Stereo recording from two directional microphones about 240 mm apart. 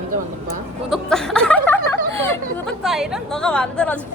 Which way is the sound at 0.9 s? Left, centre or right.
Centre.